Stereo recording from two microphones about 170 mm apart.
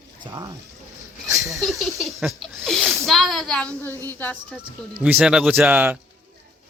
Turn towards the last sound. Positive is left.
turn(degrees=-10)  # may be behind; listen again after turning